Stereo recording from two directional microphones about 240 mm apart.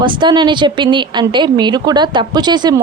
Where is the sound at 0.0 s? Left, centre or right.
Centre.